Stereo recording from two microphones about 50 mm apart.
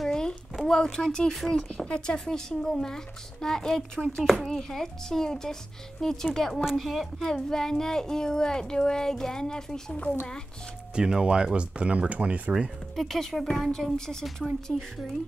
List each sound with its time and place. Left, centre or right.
0.0 s a sound: centre
0.6 s speech: centre
4.5 s speech: centre
11.0 s speech: centre
12.9 s speech: centre